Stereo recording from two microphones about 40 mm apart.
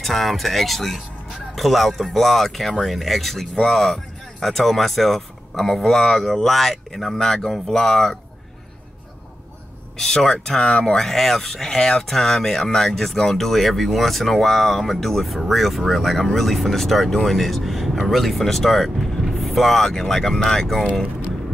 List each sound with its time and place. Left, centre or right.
0.0 s speech: centre
9.9 s speech: centre
10.6 s speech: left
11.0 s speech: centre